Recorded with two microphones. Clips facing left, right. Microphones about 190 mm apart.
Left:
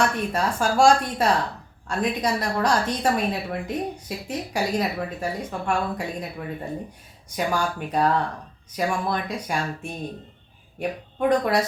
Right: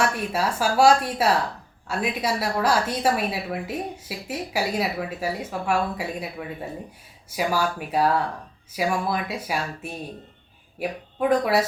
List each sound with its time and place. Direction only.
0.0 s a woman's voice: 5° right (ahead or behind)
7.3 s a woman's voice: 5° right (ahead or behind)